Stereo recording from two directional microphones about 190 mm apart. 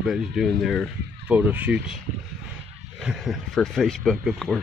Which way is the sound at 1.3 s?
10° right (ahead or behind).